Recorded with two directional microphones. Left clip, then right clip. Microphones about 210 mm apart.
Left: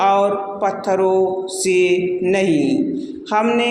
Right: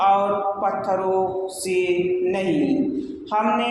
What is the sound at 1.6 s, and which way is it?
A man's voice, 45° left (ahead or behind).